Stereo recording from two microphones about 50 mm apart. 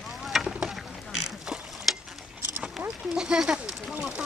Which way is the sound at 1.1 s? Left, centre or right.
Centre.